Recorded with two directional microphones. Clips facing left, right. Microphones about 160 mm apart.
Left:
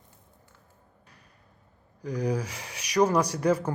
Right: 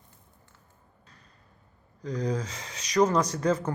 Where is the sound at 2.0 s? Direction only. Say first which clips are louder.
Left 1 dB; 10° left (ahead or behind).